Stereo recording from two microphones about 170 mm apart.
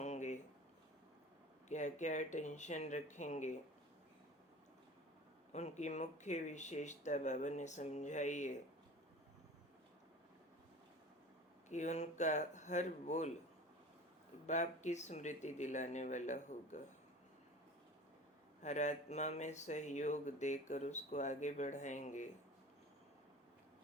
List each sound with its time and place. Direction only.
0.0 s a sound: 45° left (ahead or behind)
1.7 s speech: 45° left (ahead or behind)
5.5 s speech: 40° left (ahead or behind)
11.7 s speech: 45° left (ahead or behind)
14.4 s speech: 45° left (ahead or behind)
18.6 s speech: 45° left (ahead or behind)